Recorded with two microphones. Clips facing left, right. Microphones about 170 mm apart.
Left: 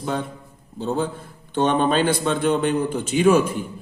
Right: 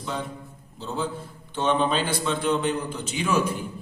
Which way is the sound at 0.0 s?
50° left (ahead or behind).